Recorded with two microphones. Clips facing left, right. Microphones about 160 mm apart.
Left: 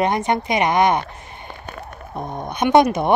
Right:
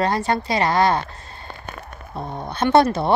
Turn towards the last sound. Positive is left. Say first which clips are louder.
# left 1 dB
turn(degrees=15)  # may be behind; listen again after turning